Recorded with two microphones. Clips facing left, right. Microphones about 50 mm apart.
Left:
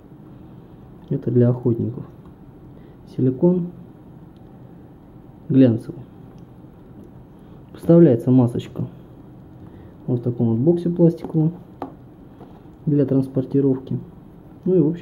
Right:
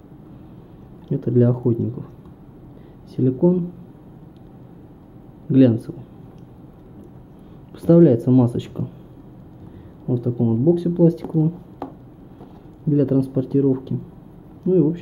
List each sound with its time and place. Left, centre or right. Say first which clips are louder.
1.1 s speech: even; centre
3.2 s speech: even; centre
5.5 s speech: even; centre
7.7 s speech: even; left
10.0 s speech: even; centre
12.9 s speech: even; centre